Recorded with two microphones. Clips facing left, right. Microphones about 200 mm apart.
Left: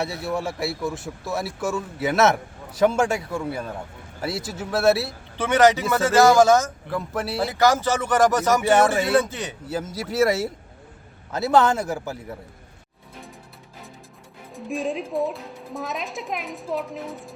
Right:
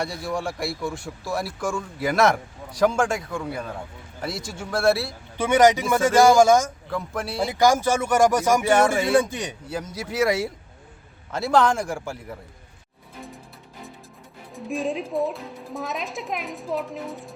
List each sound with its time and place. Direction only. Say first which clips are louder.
0.3 s speech: left 2 dB; 5° left (ahead or behind)
5.4 s speech: even; 10° right (ahead or behind)
6.9 s speech: left 2 dB; 5° left (ahead or behind)
7.6 s speech: right 1 dB; 10° right (ahead or behind)
8.6 s speech: left 2 dB; 5° left (ahead or behind)
9.3 s speech: right 1 dB; 15° right (ahead or behind)
10.2 s speech: left 2 dB; 5° left (ahead or behind)
14.5 s speech: even; centre (ahead or behind)